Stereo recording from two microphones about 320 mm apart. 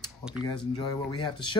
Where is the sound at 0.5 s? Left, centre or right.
Centre.